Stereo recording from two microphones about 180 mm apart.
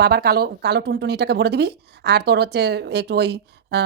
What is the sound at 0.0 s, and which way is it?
A woman's voice, 60° right (ahead or behind).